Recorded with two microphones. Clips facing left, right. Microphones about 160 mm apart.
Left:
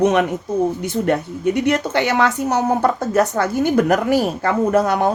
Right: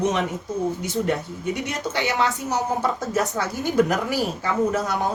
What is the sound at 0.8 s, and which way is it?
Speech, 65° left (ahead or behind).